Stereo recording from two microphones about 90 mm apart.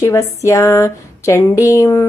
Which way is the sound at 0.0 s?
35° left (ahead or behind).